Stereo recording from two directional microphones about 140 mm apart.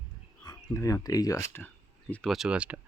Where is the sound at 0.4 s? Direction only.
25° left (ahead or behind).